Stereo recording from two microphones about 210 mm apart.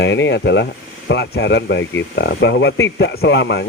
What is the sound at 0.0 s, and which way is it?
Speech, 60° left (ahead or behind).